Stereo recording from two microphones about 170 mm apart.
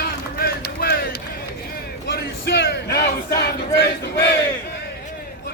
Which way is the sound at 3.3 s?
70° left (ahead or behind).